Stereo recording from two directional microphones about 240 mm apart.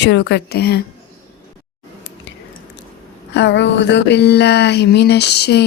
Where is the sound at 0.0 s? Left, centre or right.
Left.